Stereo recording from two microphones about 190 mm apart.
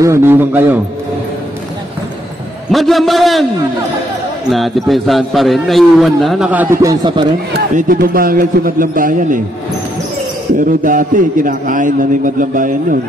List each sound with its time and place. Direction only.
0.0 s a man's voice: 15° right (ahead or behind)
2.7 s a man's voice: centre (ahead or behind)
4.5 s a man's voice: centre (ahead or behind); by 7.2 s 25° right (ahead or behind)
8.0 s a man's voice: 50° right (ahead or behind)
10.6 s a man's voice: 45° right (ahead or behind)